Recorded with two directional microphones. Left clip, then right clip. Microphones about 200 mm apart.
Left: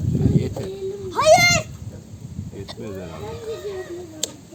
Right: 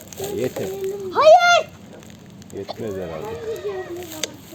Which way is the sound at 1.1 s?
50° left (ahead or behind).